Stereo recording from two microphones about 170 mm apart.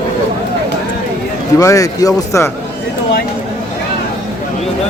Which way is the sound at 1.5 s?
20° left (ahead or behind).